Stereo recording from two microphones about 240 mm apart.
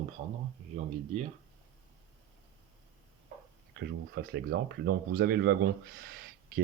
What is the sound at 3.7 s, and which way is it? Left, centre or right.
Speech, right.